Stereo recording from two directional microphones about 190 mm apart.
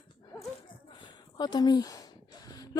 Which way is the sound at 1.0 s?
25° left (ahead or behind).